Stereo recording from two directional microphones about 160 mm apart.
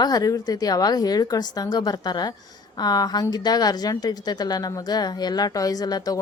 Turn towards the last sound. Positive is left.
turn(degrees=25)  # may be behind; listen again after turning